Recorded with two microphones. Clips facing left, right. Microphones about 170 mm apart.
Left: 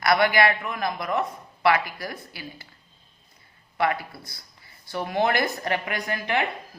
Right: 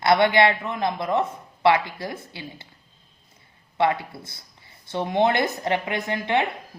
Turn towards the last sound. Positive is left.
turn(degrees=-25)  # may be behind; listen again after turning